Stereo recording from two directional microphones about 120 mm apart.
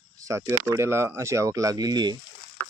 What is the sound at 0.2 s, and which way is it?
Speech, 25° right (ahead or behind).